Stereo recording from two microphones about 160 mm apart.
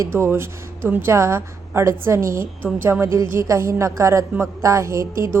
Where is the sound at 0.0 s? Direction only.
15° right (ahead or behind).